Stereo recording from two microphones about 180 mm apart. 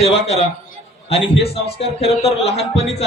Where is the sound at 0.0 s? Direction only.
35° left (ahead or behind).